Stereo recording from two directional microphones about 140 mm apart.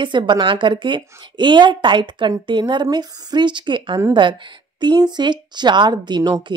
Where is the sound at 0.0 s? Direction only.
35° right (ahead or behind).